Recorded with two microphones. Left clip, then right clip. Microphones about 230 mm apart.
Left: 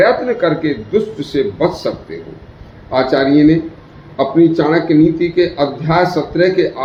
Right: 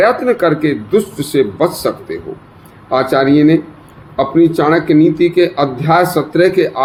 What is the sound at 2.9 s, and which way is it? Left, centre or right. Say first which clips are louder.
A man's voice: right 1 dB; right.